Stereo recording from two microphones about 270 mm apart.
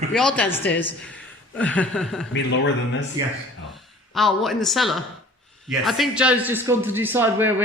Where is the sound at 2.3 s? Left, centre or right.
Left.